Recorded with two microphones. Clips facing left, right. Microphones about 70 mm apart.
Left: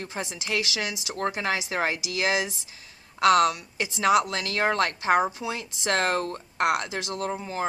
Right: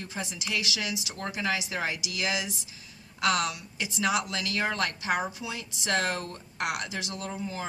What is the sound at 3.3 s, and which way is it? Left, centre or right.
Speech, left.